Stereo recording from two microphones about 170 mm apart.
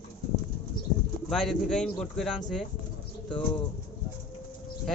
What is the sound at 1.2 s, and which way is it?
Speech, centre (ahead or behind).